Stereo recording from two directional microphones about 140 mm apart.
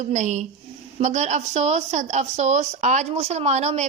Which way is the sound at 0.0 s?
55° right (ahead or behind).